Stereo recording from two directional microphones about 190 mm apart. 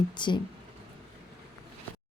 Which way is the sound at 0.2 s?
25° left (ahead or behind).